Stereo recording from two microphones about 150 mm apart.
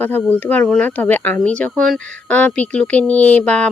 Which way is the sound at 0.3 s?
10° left (ahead or behind).